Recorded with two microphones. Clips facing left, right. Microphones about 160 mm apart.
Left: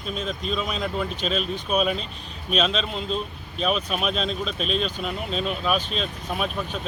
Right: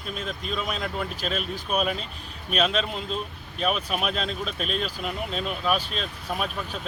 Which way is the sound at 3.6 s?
10° right (ahead or behind).